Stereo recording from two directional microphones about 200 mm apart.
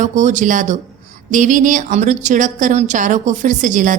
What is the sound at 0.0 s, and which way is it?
A woman's voice, 35° right (ahead or behind).